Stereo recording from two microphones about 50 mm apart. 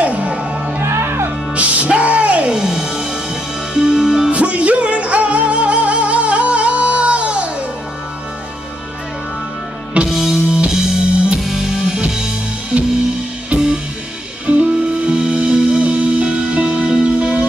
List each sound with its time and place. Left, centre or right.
0.0 s music: right
0.7 s music: right
1.5 s music: right
2.5 s music: centre
4.3 s music: right
10.0 s music: centre
14.4 s music: right
15.0 s music: centre